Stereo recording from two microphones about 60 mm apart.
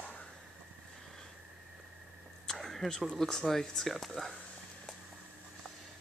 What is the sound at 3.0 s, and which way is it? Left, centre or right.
Speech, centre.